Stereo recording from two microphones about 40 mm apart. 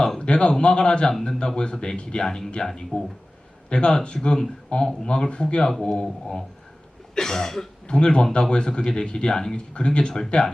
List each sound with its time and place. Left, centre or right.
0.2 s speech: left
2.9 s a man's voice: left; by 7.7 s centre
7.9 s speech: left